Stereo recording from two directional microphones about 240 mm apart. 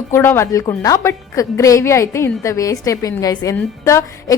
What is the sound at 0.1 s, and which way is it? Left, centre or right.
A woman's voice, centre.